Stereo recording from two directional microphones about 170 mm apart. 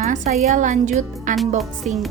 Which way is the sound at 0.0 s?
40° right (ahead or behind).